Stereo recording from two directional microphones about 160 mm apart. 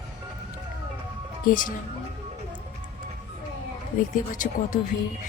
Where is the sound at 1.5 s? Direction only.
55° left (ahead or behind).